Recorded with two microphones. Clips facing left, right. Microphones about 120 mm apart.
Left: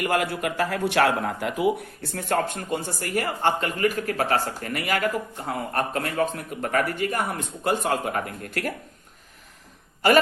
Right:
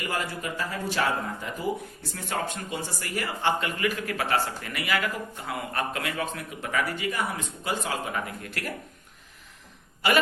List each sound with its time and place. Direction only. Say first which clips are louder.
0.0 s a man's voice: left 7 dB; 60° left (ahead or behind); by 8.7 s 45° left (ahead or behind)
10.0 s a man's voice: left 6 dB; 45° left (ahead or behind)